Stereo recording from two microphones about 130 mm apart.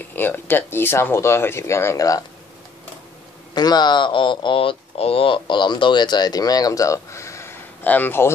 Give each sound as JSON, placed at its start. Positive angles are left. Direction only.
{"t": 0.0, "sound": "speech", "side_deg": 15}
{"t": 3.5, "sound": "speech", "side_deg": 30}